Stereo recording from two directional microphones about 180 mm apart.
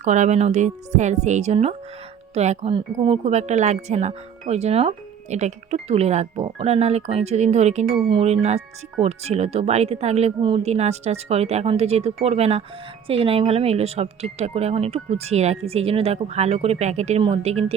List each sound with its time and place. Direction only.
0.0 s speech: 40° right (ahead or behind)